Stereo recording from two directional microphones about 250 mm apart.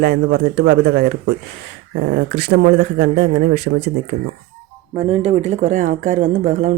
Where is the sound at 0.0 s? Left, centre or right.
Right.